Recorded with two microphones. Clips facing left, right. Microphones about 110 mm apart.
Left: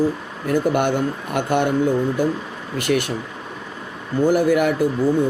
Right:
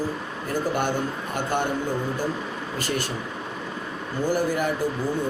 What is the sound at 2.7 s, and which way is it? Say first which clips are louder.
Speech: left 9 dB; 65° left (ahead or behind).